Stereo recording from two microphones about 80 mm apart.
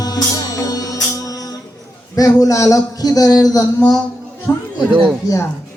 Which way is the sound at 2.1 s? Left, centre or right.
Left.